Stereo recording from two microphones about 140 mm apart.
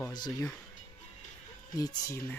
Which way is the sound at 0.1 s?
25° left (ahead or behind).